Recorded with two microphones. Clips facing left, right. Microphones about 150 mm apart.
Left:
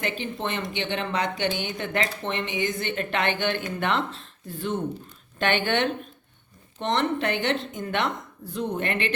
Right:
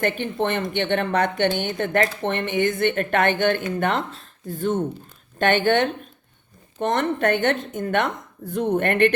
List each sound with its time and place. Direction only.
0.0 s speech: 55° right (ahead or behind)